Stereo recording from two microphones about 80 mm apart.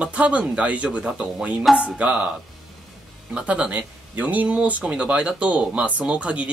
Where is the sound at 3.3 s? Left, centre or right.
Centre.